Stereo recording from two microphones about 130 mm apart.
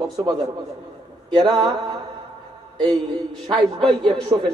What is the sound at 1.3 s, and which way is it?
A man's voice, 35° right (ahead or behind).